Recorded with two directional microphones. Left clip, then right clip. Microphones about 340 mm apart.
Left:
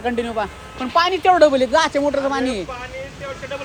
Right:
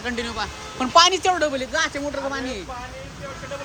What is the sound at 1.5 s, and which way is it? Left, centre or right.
Speech, centre.